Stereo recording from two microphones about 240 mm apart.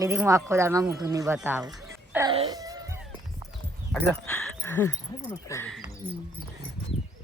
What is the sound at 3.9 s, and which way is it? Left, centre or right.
Speech, centre.